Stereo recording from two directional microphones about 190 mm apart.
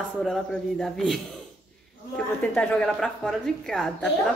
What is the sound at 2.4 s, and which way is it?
Speech, 5° left (ahead or behind).